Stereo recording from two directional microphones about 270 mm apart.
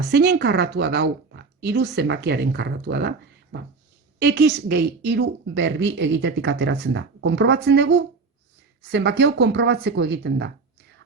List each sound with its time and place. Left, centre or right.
0.1 s a woman's voice: right